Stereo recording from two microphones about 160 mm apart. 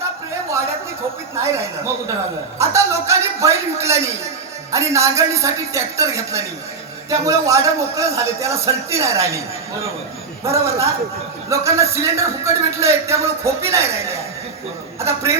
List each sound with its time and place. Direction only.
1.4 s a man's voice: 15° right (ahead or behind)
10.4 s a man's voice: 20° right (ahead or behind)